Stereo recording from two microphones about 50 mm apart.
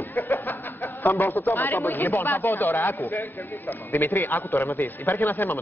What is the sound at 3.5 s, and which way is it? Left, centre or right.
A man's voice, left.